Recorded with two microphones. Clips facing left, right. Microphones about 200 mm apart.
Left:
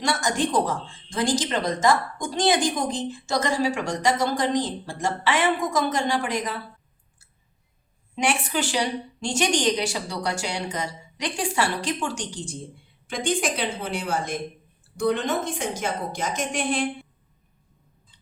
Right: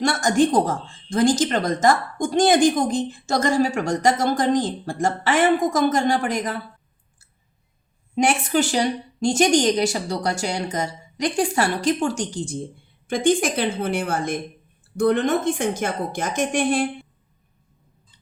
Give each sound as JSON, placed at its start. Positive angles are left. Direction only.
{"t": 0.0, "sound": "a woman's voice", "side_deg": -50}
{"t": 8.1, "sound": "a woman's voice", "side_deg": -45}